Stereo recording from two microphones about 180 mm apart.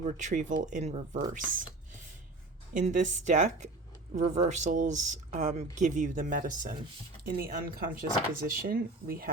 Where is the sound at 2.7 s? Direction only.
45° right (ahead or behind).